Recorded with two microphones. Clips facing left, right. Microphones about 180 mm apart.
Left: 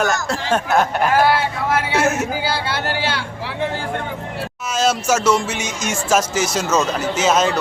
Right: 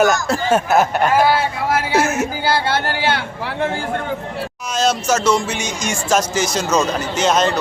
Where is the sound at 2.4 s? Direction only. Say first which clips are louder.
Right 4 dB; 55° right (ahead or behind).